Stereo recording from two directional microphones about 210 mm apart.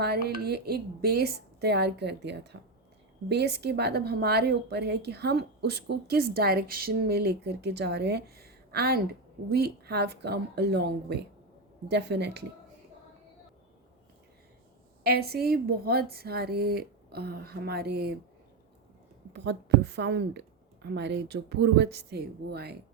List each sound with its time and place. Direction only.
0.0 s a woman's voice: 50° right (ahead or behind)
15.0 s a woman's voice: 50° right (ahead or behind)
19.3 s a woman's voice: 55° right (ahead or behind)